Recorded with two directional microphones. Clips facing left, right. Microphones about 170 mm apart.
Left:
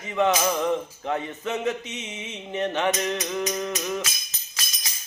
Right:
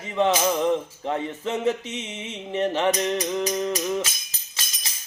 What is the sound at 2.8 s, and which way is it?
Music, 30° right (ahead or behind).